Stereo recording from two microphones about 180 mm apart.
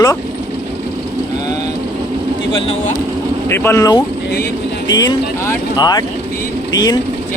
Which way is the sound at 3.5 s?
15° left (ahead or behind).